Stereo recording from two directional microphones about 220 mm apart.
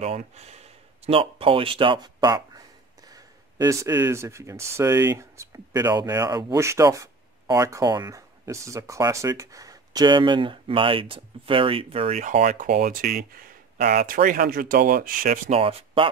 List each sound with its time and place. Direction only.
0.0 s speech: 30° right (ahead or behind)